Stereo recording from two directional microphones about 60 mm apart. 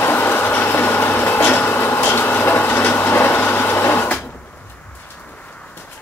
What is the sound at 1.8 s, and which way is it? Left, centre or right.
Vehicle, left.